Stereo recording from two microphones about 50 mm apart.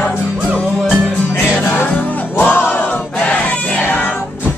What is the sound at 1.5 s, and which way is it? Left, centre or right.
Music, left.